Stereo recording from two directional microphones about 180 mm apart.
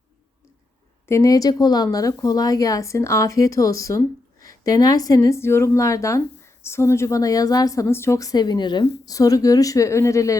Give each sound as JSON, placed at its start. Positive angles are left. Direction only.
{"t": 1.0, "sound": "speech", "side_deg": 15}